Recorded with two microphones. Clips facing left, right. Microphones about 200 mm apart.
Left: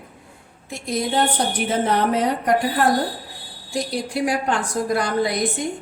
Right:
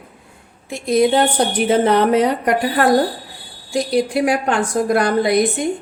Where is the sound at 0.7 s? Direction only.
70° right (ahead or behind).